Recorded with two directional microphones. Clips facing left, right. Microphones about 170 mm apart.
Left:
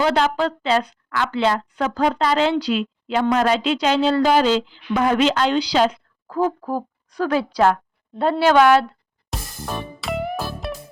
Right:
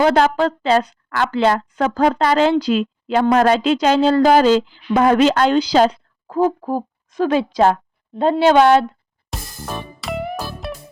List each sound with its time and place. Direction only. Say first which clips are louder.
0.0 s a woman's voice: right 4 dB; 45° right (ahead or behind)
6.2 s speech: right 4 dB; 20° right (ahead or behind)
9.3 s music: even; centre (ahead or behind)